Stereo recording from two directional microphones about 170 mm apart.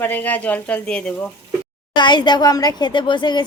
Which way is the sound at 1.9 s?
25° left (ahead or behind).